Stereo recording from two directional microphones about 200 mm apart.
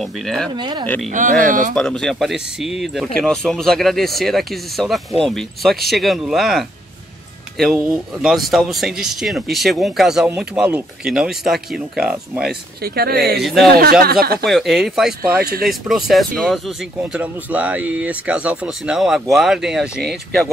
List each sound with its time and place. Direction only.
0.0 s speech: centre (ahead or behind)
0.6 s speech: 20° right (ahead or behind)
1.1 s speech: 40° right (ahead or behind)
1.8 s speech: 5° left (ahead or behind)
12.8 s speech: 50° right (ahead or behind)
13.4 s speech: centre (ahead or behind)
13.7 s speech: 50° right (ahead or behind)
14.4 s speech: centre (ahead or behind)
15.2 s speech: 50° right (ahead or behind)
15.6 s speech: centre (ahead or behind)